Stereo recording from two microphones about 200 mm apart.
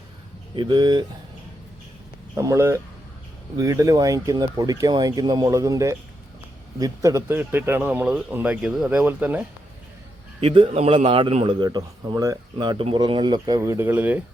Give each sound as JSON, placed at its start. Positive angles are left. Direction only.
{"t": 0.5, "sound": "a man's voice", "side_deg": -25}
{"t": 2.3, "sound": "a man's voice", "side_deg": -15}
{"t": 10.4, "sound": "a man's voice", "side_deg": -25}